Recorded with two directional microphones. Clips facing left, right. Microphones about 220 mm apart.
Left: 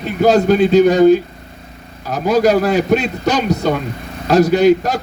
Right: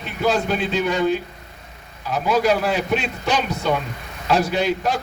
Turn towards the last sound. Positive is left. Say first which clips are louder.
# left 9 dB
turn(degrees=40)  # may be behind; listen again after turning